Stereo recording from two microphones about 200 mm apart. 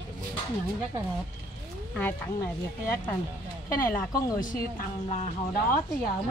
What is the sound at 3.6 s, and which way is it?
Speech, 10° left (ahead or behind).